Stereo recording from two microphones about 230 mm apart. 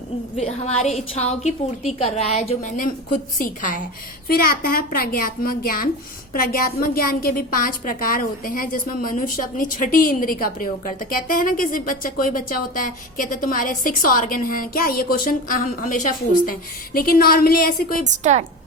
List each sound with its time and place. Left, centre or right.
0.3 s a woman's voice: left
18.2 s a woman's voice: right